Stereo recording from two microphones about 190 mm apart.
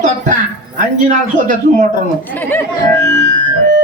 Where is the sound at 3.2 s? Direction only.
40° right (ahead or behind).